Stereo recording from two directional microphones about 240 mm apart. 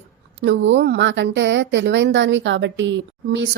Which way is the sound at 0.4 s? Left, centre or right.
Right.